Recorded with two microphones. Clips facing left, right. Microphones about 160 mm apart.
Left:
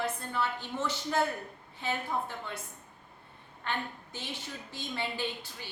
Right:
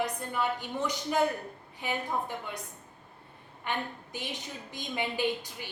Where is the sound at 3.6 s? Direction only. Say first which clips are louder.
Right 2 dB; 15° right (ahead or behind).